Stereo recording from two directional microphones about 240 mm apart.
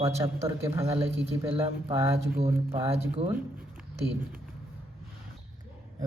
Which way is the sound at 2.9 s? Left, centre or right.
Right.